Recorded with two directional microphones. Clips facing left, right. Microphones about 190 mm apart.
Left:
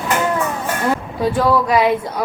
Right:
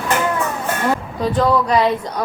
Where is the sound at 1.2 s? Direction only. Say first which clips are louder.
Left 1 dB; 10° left (ahead or behind).